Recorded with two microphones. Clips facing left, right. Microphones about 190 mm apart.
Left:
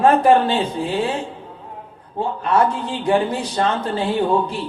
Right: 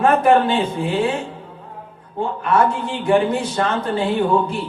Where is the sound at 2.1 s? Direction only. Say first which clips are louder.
Even; 35° left (ahead or behind).